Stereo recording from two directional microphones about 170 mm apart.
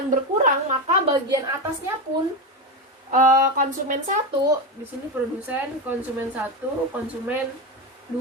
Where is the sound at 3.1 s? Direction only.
50° right (ahead or behind).